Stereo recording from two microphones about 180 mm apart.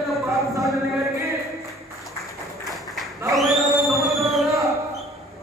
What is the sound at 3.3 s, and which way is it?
Music, centre (ahead or behind).